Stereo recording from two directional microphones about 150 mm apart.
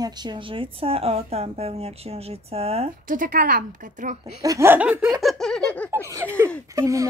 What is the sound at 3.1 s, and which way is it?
Speech, 65° right (ahead or behind).